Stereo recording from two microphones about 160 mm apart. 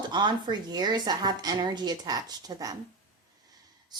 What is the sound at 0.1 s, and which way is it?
A woman's voice, 30° right (ahead or behind).